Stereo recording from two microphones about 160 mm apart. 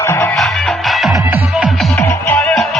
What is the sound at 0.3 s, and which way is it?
Music, centre (ahead or behind).